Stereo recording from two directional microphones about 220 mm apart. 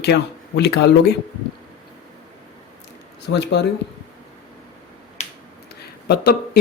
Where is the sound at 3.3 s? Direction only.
50° left (ahead or behind).